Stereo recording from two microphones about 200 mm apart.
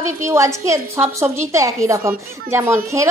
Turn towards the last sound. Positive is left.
turn(degrees=-15)  # may be behind; listen again after turning